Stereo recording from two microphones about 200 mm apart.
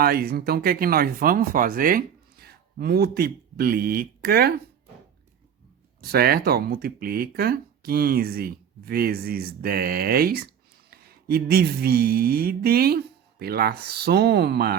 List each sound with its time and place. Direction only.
0.0 s speech: 50° right (ahead or behind)
6.0 s speech: 50° right (ahead or behind)